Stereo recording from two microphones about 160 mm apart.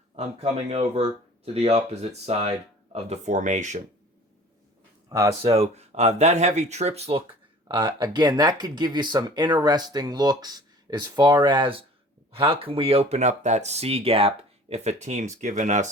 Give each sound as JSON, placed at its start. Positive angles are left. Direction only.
{"t": 0.4, "sound": "speech", "side_deg": -40}
{"t": 5.0, "sound": "speech", "side_deg": -20}
{"t": 5.4, "sound": "speech", "side_deg": -40}
{"t": 7.7, "sound": "speech", "side_deg": -30}